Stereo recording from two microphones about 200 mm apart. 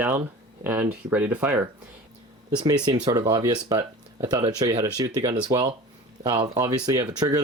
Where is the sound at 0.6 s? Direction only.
10° right (ahead or behind).